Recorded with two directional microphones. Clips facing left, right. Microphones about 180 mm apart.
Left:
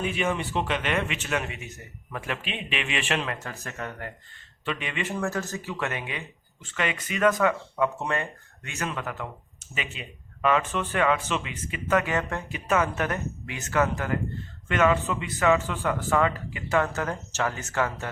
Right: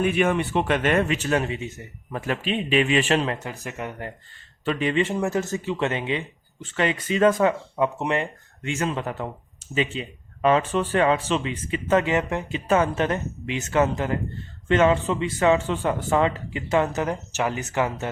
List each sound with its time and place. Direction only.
0.0 s speech: 55° right (ahead or behind); by 3.3 s 35° right (ahead or behind)
3.4 s speech: 15° right (ahead or behind)
4.6 s speech: 35° right (ahead or behind); by 18.1 s 20° right (ahead or behind)